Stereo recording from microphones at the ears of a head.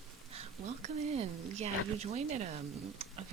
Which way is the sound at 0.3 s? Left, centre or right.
Right.